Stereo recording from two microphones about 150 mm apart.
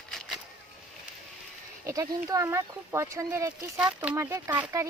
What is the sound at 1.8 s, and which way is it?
Speech, 20° right (ahead or behind).